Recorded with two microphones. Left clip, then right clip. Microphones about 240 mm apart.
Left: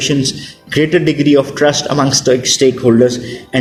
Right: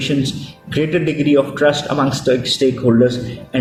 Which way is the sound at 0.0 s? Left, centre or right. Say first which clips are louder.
Left 4 dB; left.